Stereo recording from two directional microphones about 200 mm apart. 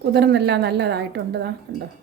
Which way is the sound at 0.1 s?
55° right (ahead or behind).